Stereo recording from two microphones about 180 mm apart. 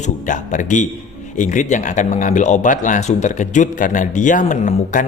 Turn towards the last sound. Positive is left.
turn(degrees=45)  # may be behind; listen again after turning